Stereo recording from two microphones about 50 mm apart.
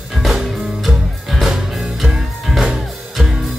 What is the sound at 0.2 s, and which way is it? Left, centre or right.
Music, centre.